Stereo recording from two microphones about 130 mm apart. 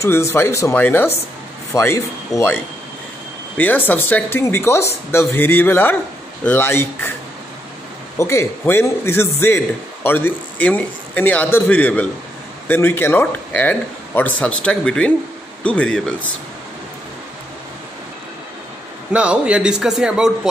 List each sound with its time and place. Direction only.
0.0 s a man's voice: 20° left (ahead or behind)
8.2 s a man's voice: 20° left (ahead or behind)
19.1 s a man's voice: 10° right (ahead or behind)